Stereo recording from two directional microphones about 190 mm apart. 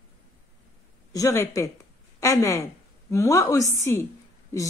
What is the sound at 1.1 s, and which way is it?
A woman's voice, 15° left (ahead or behind).